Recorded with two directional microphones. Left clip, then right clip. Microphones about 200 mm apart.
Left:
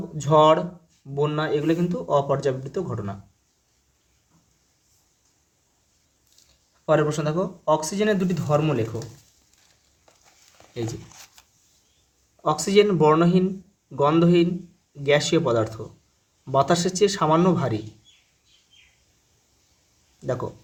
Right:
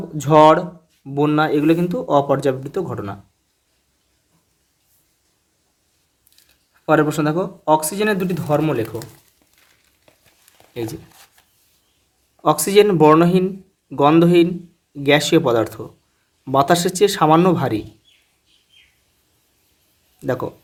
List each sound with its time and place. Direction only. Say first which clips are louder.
0.2 s speech: right 5 dB; 35° right (ahead or behind)
6.8 s speech: right 5 dB; 35° right (ahead or behind)
12.4 s speech: right 5 dB; 35° right (ahead or behind)
20.2 s speech: right 5 dB; 35° right (ahead or behind)